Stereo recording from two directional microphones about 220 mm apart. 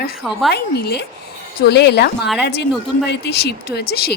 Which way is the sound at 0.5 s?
45° left (ahead or behind).